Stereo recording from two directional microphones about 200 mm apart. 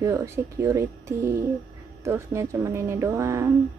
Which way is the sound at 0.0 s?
15° right (ahead or behind).